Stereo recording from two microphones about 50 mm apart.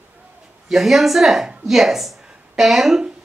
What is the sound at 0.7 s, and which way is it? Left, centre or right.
A woman's voice, centre.